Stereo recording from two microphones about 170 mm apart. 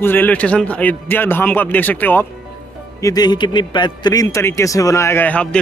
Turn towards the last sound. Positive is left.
turn(degrees=10)  # may be behind; listen again after turning